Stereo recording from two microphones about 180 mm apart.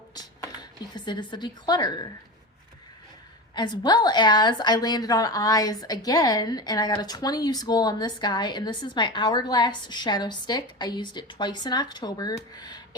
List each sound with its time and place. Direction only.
0.1 s speech: 25° left (ahead or behind)
3.5 s a woman's voice: 25° left (ahead or behind)